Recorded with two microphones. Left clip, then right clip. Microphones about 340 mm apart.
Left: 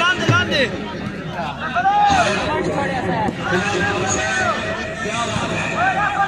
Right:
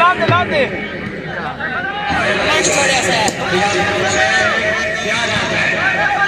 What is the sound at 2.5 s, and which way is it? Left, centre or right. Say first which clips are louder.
Speech: right 7 dB; right.